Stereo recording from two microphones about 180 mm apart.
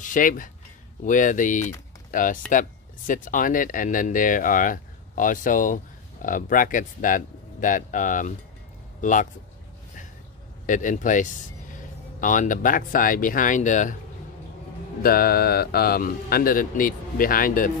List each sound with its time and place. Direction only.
0.0 s speech: 45° left (ahead or behind)
10.7 s speech: 45° left (ahead or behind)
15.0 s speech: 55° left (ahead or behind)